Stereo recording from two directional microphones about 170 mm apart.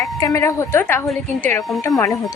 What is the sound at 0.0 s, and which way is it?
Speech, 20° left (ahead or behind).